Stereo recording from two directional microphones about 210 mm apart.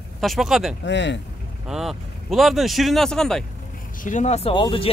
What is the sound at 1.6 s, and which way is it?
Speech, centre (ahead or behind).